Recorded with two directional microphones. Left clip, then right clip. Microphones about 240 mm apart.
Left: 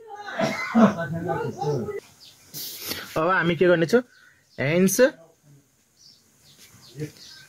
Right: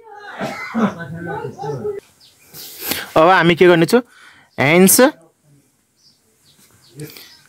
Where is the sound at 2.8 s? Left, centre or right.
Right.